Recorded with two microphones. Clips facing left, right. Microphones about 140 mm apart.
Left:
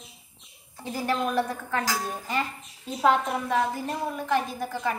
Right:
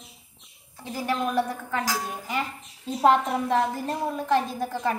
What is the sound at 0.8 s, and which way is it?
A child's voice, centre (ahead or behind).